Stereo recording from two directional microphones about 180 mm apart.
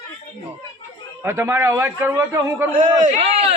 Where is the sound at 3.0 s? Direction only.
35° right (ahead or behind).